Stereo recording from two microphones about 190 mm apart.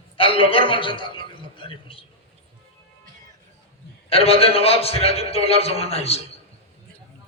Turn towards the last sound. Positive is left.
turn(degrees=30)  # may be behind; listen again after turning